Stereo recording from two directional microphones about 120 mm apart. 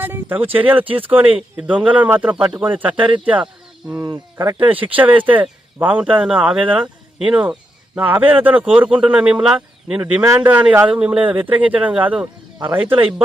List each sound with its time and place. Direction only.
0.0 s a man's voice: 15° right (ahead or behind)
4.0 s speech: 35° right (ahead or behind)
4.5 s a man's voice: 15° right (ahead or behind)
10.2 s speech: 25° right (ahead or behind)
10.5 s a man's voice: 10° right (ahead or behind)